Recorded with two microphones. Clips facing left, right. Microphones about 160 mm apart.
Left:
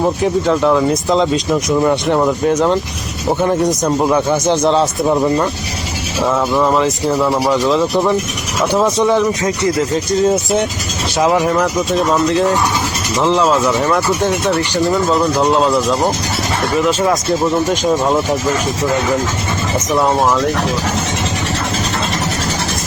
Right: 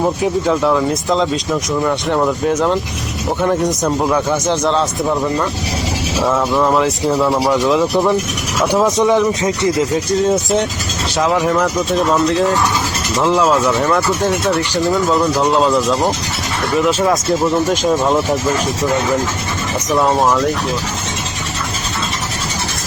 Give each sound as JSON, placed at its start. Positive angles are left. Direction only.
{"t": 0.0, "sound": "speech", "side_deg": 0}
{"t": 4.8, "sound": "speech", "side_deg": 20}
{"t": 6.2, "sound": "speech", "side_deg": 0}
{"t": 9.9, "sound": "speech", "side_deg": 0}
{"t": 20.1, "sound": "speech", "side_deg": 0}